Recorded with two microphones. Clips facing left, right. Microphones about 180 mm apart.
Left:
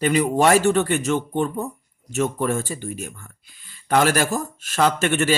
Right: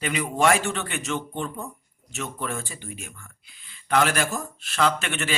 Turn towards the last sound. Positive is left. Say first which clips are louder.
# left 6 dB
turn(degrees=45)  # may be behind; listen again after turning